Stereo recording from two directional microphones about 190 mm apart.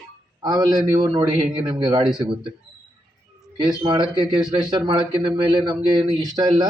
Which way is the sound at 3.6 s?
25° right (ahead or behind).